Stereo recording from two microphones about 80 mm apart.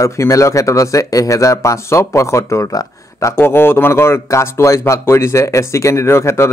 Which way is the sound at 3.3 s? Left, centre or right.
Left.